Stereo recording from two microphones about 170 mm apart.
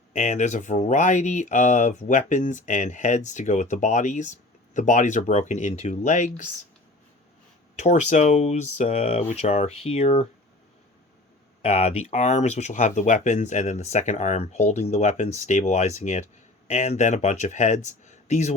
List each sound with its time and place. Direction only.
0.1 s speech: 45° left (ahead or behind)
7.8 s speech: 45° left (ahead or behind)
11.6 s speech: 40° left (ahead or behind)